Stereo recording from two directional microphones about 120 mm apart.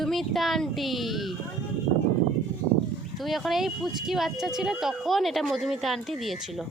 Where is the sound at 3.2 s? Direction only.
Centre (ahead or behind).